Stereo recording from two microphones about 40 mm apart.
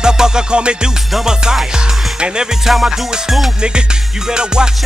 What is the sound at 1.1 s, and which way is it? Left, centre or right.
Music, centre.